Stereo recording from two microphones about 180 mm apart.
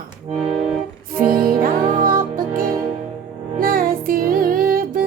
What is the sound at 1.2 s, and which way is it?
Music, 55° right (ahead or behind).